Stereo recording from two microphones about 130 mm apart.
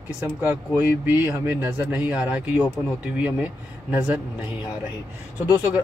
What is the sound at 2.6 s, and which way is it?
Speech, 25° left (ahead or behind).